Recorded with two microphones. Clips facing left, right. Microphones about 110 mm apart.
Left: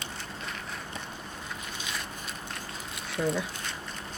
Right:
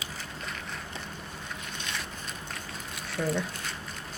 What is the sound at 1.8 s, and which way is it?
Boat, 5° left (ahead or behind).